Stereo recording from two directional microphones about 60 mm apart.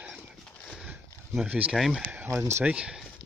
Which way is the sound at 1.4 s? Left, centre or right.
Right.